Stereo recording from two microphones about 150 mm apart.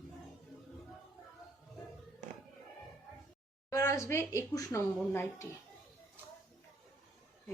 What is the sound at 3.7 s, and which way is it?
Speech, 20° left (ahead or behind).